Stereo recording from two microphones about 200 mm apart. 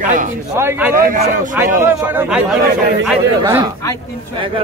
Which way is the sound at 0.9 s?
40° right (ahead or behind).